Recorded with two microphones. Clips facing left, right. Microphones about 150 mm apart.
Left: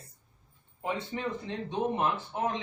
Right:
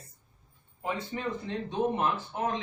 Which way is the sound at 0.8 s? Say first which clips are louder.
Even; 25° left (ahead or behind).